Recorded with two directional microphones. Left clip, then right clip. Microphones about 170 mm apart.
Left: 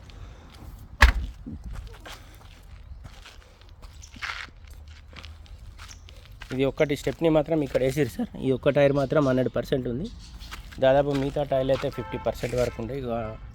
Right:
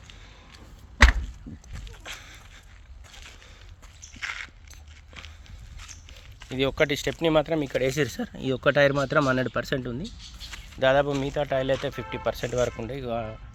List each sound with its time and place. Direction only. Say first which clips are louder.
1.9 s walk: right 4 dB; 15° left (ahead or behind)
4.1 s a sound: even; centre (ahead or behind)
6.1 s speech: left 3 dB; 5° left (ahead or behind)
10.5 s a sound: left 1 dB; 15° left (ahead or behind)
11.1 s speech: left 1 dB; 5° left (ahead or behind)
12.6 s speech: even; 15° right (ahead or behind)